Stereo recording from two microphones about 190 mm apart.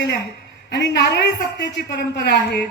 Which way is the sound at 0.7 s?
65° left (ahead or behind).